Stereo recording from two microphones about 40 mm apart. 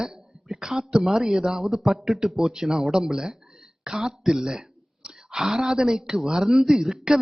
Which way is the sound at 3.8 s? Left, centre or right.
Centre.